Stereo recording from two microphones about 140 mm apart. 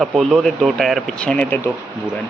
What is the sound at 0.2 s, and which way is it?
Speech, centre (ahead or behind).